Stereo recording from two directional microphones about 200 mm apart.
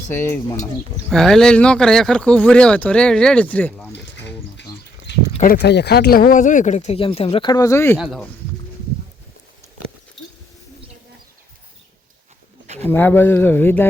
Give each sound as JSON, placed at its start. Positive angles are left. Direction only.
{"t": 0.1, "sound": "speech", "side_deg": 15}
{"t": 1.1, "sound": "speech", "side_deg": 0}
{"t": 5.3, "sound": "speech", "side_deg": 40}
{"t": 5.5, "sound": "speech", "side_deg": 55}
{"t": 7.9, "sound": "speech", "side_deg": 0}
{"t": 12.8, "sound": "speech", "side_deg": 10}